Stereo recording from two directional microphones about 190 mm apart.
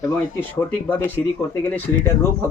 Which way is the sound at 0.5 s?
10° left (ahead or behind).